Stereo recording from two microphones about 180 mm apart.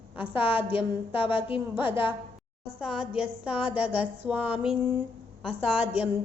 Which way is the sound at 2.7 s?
5° right (ahead or behind).